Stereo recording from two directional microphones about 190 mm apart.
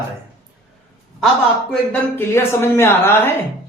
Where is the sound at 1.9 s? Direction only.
10° left (ahead or behind).